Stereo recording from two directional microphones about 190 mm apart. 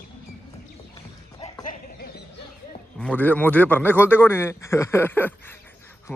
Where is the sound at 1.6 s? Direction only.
50° left (ahead or behind).